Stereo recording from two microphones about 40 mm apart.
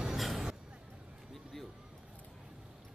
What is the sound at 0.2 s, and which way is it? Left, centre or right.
Vehicle, centre.